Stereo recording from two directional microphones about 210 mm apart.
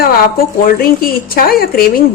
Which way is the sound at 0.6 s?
45° left (ahead or behind).